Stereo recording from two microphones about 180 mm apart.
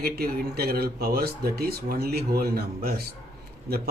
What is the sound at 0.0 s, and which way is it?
Speech, 60° right (ahead or behind).